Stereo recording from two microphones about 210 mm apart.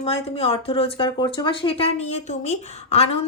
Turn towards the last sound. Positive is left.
turn(degrees=30)  # may be behind; listen again after turning